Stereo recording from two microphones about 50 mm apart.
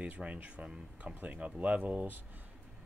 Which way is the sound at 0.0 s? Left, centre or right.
Right.